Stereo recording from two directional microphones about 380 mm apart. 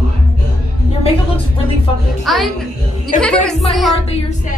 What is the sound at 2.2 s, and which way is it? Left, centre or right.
Speech, centre.